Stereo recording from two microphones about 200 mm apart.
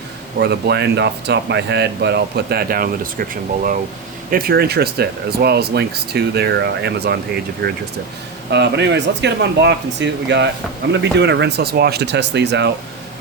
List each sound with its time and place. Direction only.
0.3 s speech: 55° right (ahead or behind)